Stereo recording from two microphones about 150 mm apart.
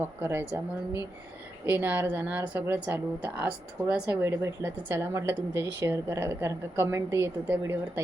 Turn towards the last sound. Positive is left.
turn(degrees=-15)  # may be behind; listen again after turning